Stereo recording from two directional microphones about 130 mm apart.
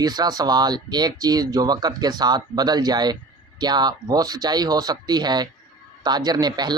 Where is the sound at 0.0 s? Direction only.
30° right (ahead or behind).